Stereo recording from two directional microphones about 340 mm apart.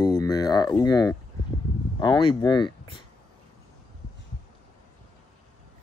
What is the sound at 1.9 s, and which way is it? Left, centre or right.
Speech, centre.